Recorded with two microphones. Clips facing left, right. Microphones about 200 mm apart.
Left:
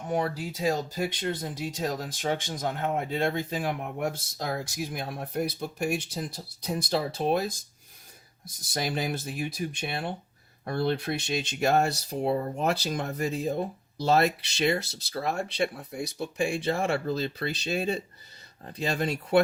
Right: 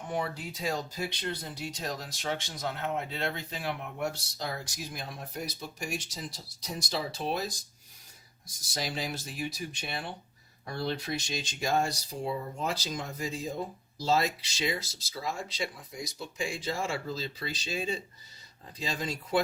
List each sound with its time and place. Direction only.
0.1 s speech: 40° left (ahead or behind); by 19.4 s 60° left (ahead or behind)